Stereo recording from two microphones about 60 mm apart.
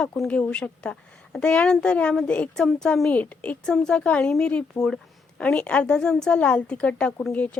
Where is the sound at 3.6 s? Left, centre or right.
Centre.